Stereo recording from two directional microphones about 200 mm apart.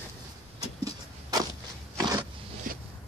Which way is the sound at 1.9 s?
15° right (ahead or behind).